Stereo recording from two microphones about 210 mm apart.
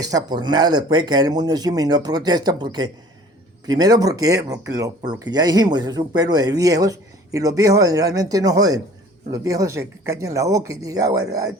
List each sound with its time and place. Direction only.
0.0 s speech: 15° right (ahead or behind)